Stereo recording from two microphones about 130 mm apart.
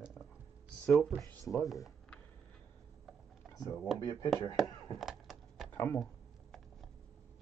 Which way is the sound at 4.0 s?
25° left (ahead or behind).